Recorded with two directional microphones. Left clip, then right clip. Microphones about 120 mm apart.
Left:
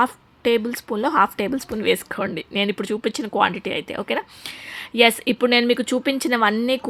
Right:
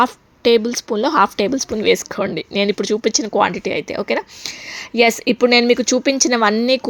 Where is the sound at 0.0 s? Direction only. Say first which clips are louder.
Right 5 dB; 30° right (ahead or behind).